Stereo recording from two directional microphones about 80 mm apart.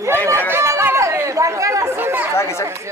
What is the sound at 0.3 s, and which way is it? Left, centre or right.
Chatter, right.